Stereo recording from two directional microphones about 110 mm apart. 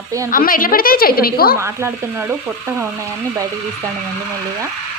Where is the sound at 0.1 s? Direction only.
30° right (ahead or behind).